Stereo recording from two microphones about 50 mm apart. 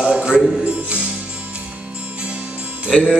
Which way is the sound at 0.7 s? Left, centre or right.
Right.